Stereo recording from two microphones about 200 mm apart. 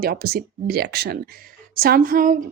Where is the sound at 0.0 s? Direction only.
50° right (ahead or behind).